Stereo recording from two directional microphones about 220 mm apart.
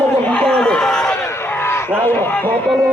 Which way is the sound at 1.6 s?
10° left (ahead or behind).